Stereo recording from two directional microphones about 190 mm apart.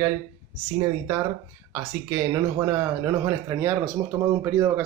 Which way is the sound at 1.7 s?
15° right (ahead or behind).